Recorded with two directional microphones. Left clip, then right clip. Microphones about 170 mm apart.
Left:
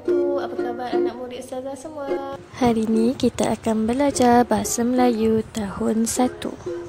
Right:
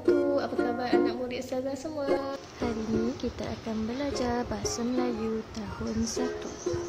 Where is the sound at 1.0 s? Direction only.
15° right (ahead or behind).